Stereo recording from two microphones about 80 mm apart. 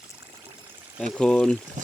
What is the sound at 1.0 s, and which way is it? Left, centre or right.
Speech, centre.